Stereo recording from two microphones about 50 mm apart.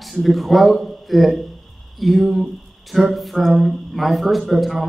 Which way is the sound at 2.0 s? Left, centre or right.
Centre.